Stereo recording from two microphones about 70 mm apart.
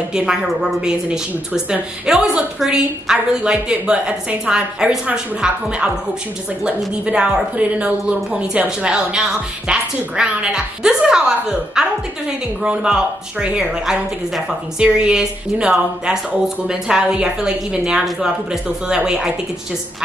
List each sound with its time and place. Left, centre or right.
0.1 s speech: centre
7.1 s speech: centre